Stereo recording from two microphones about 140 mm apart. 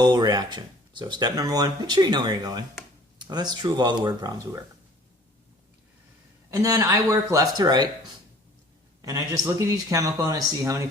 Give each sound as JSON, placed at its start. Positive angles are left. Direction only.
{"t": 0.0, "sound": "speech", "side_deg": -30}
{"t": 6.6, "sound": "speech", "side_deg": -25}
{"t": 9.0, "sound": "speech", "side_deg": -25}